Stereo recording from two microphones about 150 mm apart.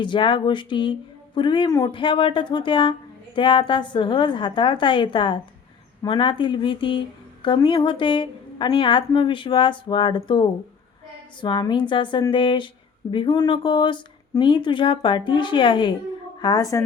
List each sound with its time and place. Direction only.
0.0 s a woman's voice: 30° left (ahead or behind)